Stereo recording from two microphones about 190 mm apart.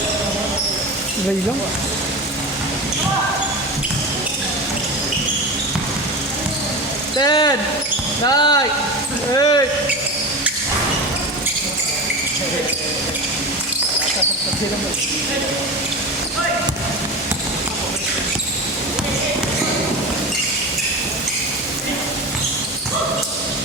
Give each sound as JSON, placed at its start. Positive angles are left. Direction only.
{"t": 7.2, "sound": "speech", "side_deg": 20}